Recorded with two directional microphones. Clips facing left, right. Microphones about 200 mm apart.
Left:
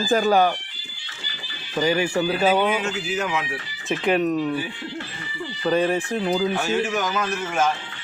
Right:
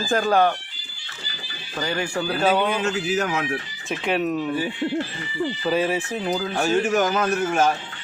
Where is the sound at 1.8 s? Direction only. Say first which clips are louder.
Left 4 dB; 5° left (ahead or behind).